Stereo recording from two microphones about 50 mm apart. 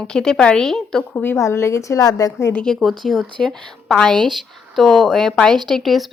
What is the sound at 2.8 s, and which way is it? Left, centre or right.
Speech, centre.